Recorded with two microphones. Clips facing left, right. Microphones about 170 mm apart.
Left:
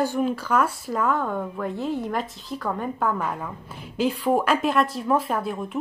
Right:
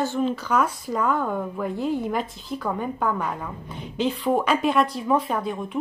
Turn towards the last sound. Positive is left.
turn(degrees=5)  # may be behind; listen again after turning